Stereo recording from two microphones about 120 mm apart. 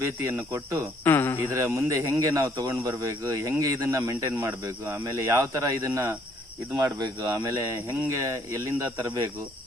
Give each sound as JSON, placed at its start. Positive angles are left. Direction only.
{"t": 0.0, "sound": "speech", "side_deg": -20}
{"t": 1.0, "sound": "speech", "side_deg": 20}
{"t": 1.5, "sound": "speech", "side_deg": -25}